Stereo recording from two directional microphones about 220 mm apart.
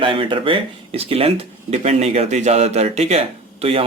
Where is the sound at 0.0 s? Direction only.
25° right (ahead or behind).